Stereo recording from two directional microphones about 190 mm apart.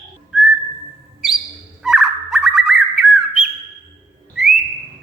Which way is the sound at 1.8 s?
Centre (ahead or behind).